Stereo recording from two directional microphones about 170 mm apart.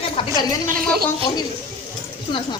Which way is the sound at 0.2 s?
30° left (ahead or behind).